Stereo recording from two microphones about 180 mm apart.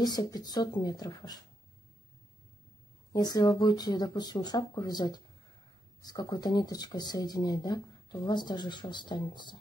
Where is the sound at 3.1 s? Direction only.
20° left (ahead or behind).